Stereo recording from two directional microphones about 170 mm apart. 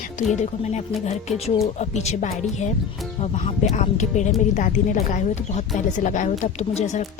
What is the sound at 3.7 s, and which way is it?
Speech, 45° left (ahead or behind).